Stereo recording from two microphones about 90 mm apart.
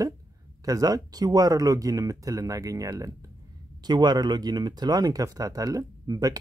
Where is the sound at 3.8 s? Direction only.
50° right (ahead or behind).